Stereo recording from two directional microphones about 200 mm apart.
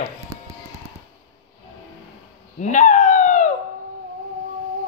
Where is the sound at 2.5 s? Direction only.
40° left (ahead or behind).